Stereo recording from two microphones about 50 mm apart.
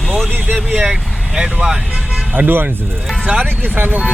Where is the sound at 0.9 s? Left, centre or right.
Centre.